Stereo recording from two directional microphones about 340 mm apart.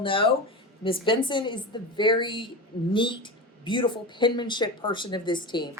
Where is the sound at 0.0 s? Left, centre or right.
Centre.